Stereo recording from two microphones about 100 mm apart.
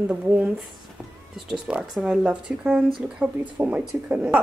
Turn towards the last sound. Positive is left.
turn(degrees=-15)  # may be behind; listen again after turning